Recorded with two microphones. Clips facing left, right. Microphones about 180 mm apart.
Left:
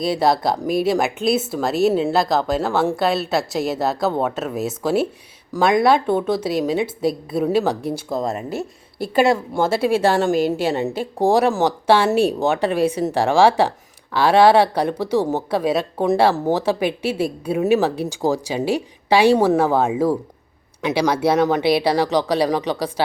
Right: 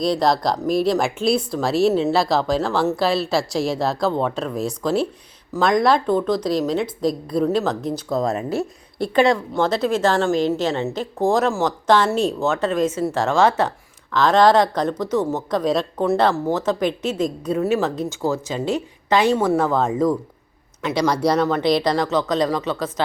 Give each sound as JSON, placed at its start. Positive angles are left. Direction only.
{"t": 0.0, "sound": "speech", "side_deg": 5}